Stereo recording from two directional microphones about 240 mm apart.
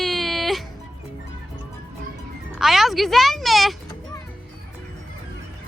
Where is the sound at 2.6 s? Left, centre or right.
Centre.